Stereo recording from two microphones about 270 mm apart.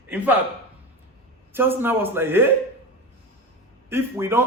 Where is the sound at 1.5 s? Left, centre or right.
Centre.